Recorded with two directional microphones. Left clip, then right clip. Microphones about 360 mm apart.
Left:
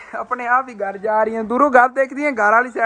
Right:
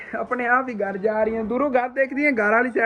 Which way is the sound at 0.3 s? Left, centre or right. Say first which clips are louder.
Left 3 dB; centre.